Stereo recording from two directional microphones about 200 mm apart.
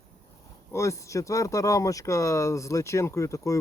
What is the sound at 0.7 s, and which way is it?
Speech, 15° left (ahead or behind).